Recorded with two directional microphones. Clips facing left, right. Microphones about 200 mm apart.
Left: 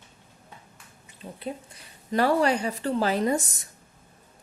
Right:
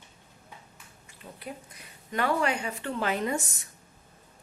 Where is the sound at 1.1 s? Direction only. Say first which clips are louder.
Left 6 dB; 25° left (ahead or behind).